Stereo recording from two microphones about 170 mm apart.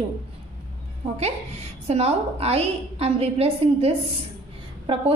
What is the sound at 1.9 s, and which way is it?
A woman's voice, 40° right (ahead or behind).